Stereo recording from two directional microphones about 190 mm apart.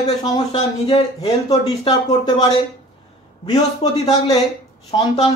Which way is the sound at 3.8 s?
20° left (ahead or behind).